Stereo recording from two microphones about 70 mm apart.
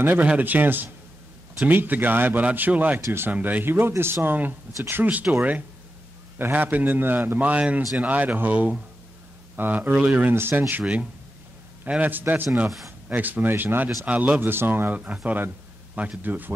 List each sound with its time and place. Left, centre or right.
0.0 s a man's voice: right
10.3 s speech: right
11.8 s a man's voice: right
14.0 s a man's voice: centre